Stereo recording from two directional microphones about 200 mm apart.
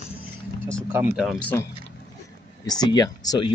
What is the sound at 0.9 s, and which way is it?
Speech, centre (ahead or behind).